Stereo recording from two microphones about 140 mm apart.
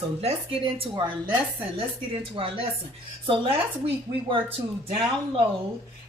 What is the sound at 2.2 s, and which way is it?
Speech, 40° right (ahead or behind).